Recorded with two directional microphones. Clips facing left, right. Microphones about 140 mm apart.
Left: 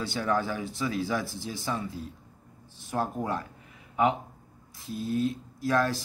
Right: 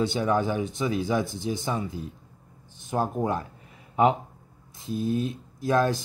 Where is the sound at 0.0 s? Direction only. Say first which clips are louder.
Right 4 dB; 20° right (ahead or behind).